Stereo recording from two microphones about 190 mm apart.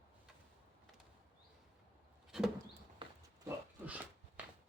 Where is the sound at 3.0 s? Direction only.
25° right (ahead or behind).